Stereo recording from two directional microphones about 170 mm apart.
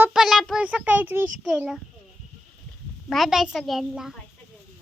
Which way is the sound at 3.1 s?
Centre (ahead or behind).